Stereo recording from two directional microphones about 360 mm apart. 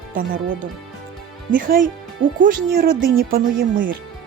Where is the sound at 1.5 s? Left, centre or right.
Right.